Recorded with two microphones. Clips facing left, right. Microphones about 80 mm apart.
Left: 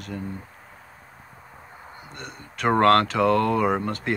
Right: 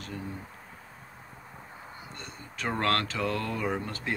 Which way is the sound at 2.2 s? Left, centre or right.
Left.